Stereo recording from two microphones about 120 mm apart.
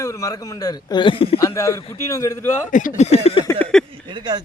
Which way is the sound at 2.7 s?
80° left.